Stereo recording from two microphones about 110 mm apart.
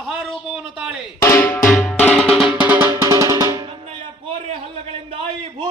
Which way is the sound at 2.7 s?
25° right (ahead or behind).